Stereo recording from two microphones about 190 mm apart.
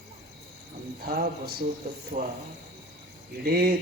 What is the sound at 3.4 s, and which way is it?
Speech, 55° right (ahead or behind).